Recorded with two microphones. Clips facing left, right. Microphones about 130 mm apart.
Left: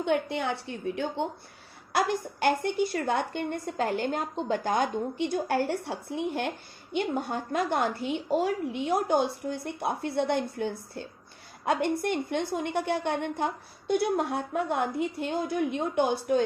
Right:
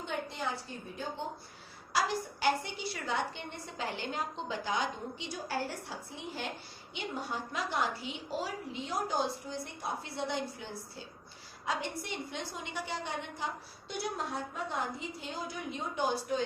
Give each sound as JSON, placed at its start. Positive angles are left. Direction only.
{"t": 0.0, "sound": "a woman's voice", "side_deg": 65}
{"t": 1.9, "sound": "a woman's voice", "side_deg": 55}